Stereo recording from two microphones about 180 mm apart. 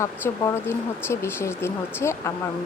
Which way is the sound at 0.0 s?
15° left (ahead or behind).